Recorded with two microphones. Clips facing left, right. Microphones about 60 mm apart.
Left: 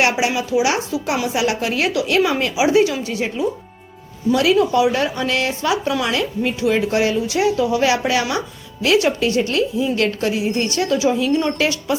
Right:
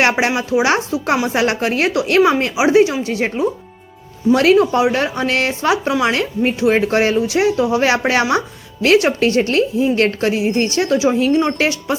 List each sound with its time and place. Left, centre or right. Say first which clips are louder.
0.0 s speech: right 2 dB; right